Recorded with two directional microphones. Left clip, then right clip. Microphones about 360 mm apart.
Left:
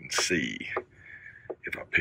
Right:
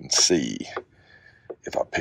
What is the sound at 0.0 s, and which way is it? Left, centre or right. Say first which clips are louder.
Speech: right 7 dB; centre.